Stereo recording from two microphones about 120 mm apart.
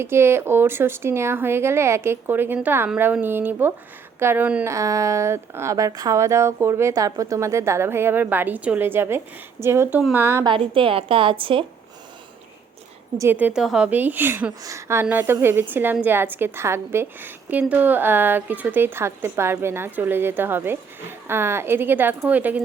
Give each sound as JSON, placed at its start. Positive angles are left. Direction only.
{"t": 0.0, "sound": "a woman's voice", "side_deg": -20}
{"t": 4.6, "sound": "speech", "side_deg": -25}
{"t": 10.4, "sound": "a woman's voice", "side_deg": -45}
{"t": 13.3, "sound": "a woman's voice", "side_deg": -10}